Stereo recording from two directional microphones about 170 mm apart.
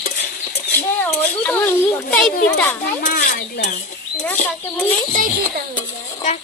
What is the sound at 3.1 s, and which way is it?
Speech, 60° left (ahead or behind).